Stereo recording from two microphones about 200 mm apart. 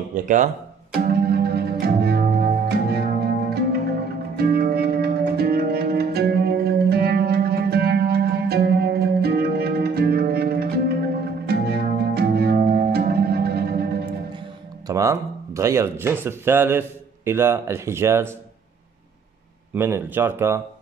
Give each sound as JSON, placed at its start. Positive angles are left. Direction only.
{"t": 0.1, "sound": "speech", "side_deg": -40}
{"t": 1.0, "sound": "music", "side_deg": -50}
{"t": 14.9, "sound": "speech", "side_deg": -15}
{"t": 19.7, "sound": "speech", "side_deg": -10}